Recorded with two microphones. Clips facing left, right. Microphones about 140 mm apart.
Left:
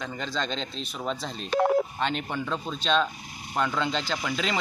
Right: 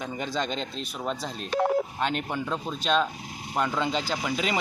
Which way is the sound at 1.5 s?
90° left.